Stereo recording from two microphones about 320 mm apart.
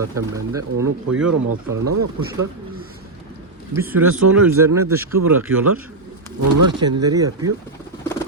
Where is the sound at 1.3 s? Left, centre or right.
Right.